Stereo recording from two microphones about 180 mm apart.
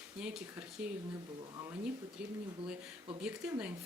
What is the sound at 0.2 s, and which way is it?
Speech, 5° right (ahead or behind).